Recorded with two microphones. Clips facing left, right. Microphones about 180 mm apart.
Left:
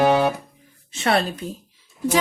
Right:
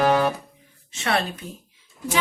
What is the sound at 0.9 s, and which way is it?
Music, 35° left (ahead or behind).